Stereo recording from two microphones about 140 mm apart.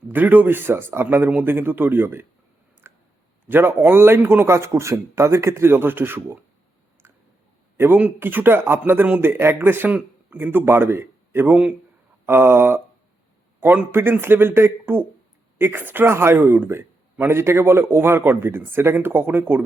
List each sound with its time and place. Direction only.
0.1 s speech: 15° right (ahead or behind)
2.8 s clicking: 15° right (ahead or behind)
3.5 s speech: 15° right (ahead or behind)
7.8 s speech: 10° right (ahead or behind)